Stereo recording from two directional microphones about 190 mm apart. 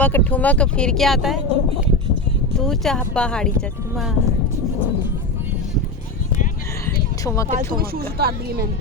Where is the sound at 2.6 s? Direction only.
5° left (ahead or behind).